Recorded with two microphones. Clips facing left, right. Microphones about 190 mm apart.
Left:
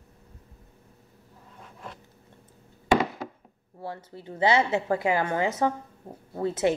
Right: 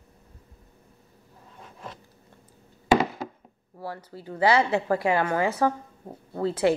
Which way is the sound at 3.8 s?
20° left (ahead or behind).